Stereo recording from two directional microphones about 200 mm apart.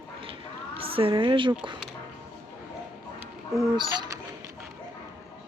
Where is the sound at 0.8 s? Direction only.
25° right (ahead or behind).